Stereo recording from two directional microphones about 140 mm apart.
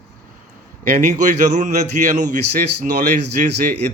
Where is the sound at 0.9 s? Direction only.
65° right (ahead or behind).